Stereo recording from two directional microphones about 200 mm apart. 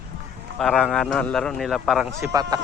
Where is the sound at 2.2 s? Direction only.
20° right (ahead or behind).